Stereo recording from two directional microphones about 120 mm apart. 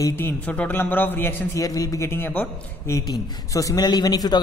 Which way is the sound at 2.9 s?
30° left (ahead or behind).